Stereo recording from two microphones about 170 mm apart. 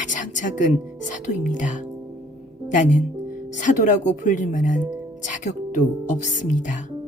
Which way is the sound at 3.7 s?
45° left (ahead or behind).